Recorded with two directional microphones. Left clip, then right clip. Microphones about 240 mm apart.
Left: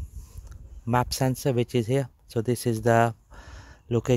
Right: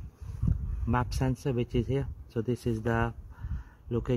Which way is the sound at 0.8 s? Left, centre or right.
Left.